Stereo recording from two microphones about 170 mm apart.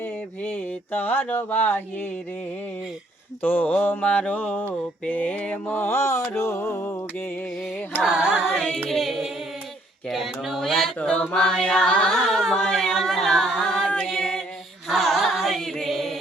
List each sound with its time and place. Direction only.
0.0 s mantra: 10° left (ahead or behind)
3.4 s mantra: 10° left (ahead or behind)
8.0 s a sound: 5° right (ahead or behind)
14.8 s chant: centre (ahead or behind)